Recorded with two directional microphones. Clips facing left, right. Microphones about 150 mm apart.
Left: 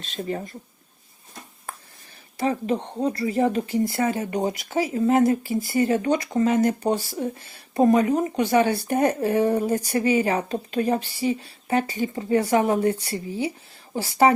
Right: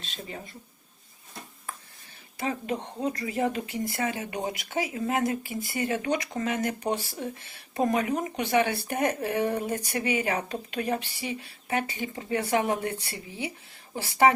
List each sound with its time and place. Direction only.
0.0 s speech: 45° left (ahead or behind)
2.4 s speech: 35° left (ahead or behind)